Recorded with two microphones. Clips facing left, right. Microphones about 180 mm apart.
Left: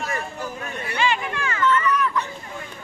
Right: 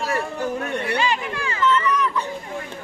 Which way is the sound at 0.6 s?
70° right (ahead or behind).